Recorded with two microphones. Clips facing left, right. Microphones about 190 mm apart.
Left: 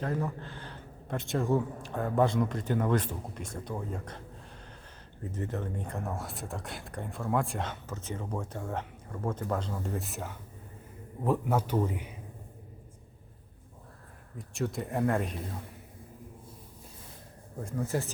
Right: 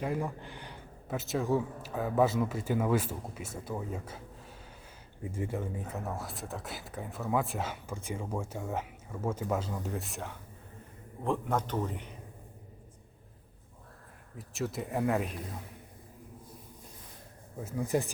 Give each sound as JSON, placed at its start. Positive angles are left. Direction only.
{"t": 0.0, "sound": "speech", "side_deg": -10}
{"t": 5.2, "sound": "a man's voice", "side_deg": -10}
{"t": 14.3, "sound": "speech", "side_deg": 0}
{"t": 17.6, "sound": "speech", "side_deg": -5}
{"t": 17.8, "sound": "speech", "side_deg": -15}